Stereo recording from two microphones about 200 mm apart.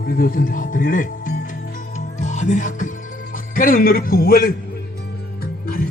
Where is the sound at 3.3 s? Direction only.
45° left (ahead or behind).